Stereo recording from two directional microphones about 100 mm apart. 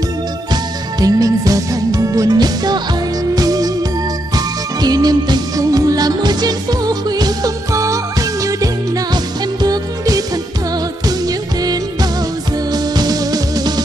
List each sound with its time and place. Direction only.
0.5 s music: 40° right (ahead or behind)